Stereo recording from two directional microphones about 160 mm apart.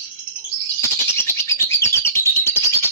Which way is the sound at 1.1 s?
15° left (ahead or behind).